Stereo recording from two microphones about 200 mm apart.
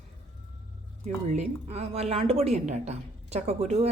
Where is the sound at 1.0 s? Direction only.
35° right (ahead or behind).